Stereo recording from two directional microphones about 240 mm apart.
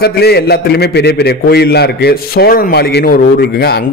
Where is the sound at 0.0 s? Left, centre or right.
Left.